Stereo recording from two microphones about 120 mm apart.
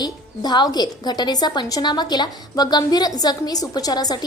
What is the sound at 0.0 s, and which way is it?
A woman's voice, 35° left (ahead or behind).